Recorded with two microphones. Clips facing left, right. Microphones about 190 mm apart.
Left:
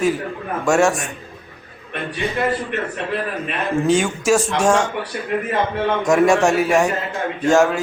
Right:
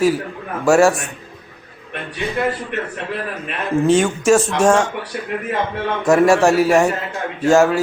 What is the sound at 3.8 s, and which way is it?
Speech, centre (ahead or behind).